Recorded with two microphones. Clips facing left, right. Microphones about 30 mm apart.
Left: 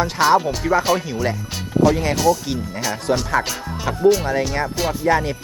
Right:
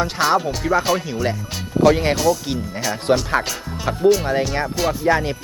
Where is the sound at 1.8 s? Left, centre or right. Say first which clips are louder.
Right 2 dB; right.